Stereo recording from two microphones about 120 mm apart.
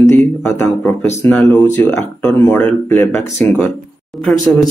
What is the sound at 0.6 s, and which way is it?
A man's voice, 20° left (ahead or behind).